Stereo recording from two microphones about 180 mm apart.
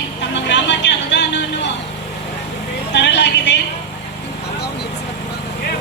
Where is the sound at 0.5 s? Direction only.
80° left.